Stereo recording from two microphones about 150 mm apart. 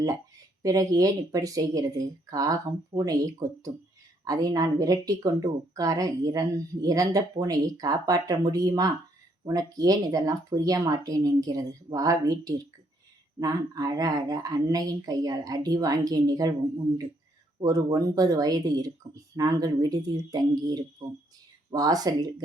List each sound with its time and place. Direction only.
0.6 s speech: 25° right (ahead or behind)